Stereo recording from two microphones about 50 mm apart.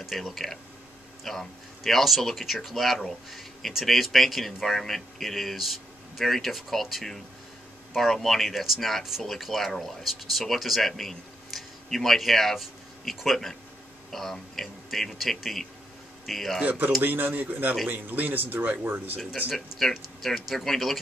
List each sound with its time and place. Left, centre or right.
0.0 s speech: centre
16.6 s speech: right
19.5 s speech: centre